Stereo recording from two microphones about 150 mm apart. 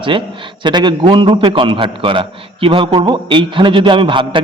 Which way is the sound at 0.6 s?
30° right (ahead or behind).